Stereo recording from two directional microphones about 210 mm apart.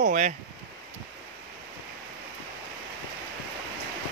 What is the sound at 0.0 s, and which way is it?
Speech, 35° right (ahead or behind).